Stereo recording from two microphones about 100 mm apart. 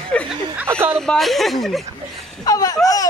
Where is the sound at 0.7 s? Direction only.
25° right (ahead or behind).